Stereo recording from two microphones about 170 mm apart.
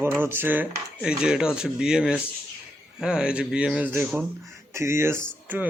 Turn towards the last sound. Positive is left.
turn(degrees=-10)  # may be behind; listen again after turning